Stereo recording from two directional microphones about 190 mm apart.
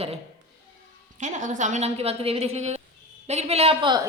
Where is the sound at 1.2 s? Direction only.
40° right (ahead or behind).